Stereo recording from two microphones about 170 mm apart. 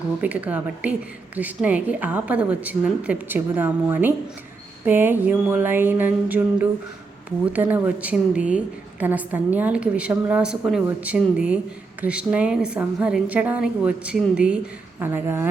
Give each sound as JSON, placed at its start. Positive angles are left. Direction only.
{"t": 0.2, "sound": "a woman's voice", "side_deg": -10}